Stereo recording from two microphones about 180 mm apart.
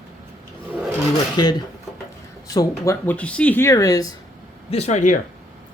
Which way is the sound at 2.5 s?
15° left (ahead or behind).